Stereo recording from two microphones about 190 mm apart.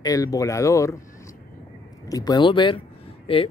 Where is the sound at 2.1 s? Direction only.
20° left (ahead or behind).